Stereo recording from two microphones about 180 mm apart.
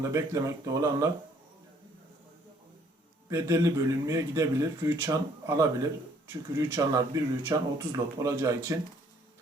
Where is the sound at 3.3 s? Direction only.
15° right (ahead or behind).